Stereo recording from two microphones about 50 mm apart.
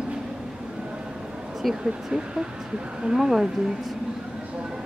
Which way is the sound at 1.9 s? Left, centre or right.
Centre.